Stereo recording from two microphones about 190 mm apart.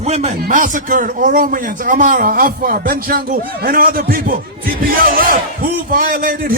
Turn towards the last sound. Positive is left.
turn(degrees=-50)  # may be behind; listen again after turning